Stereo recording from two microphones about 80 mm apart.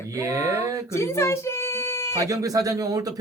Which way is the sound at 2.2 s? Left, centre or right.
Right.